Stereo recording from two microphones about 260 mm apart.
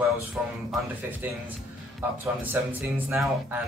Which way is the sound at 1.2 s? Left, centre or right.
Centre.